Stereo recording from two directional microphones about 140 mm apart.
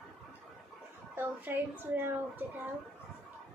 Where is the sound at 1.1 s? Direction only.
15° right (ahead or behind).